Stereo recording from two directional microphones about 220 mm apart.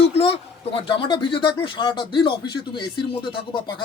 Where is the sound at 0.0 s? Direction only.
25° left (ahead or behind).